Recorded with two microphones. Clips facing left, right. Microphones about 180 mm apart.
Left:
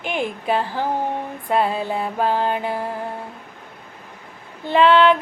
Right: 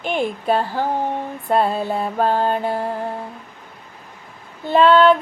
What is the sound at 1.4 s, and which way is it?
Music, 40° right (ahead or behind).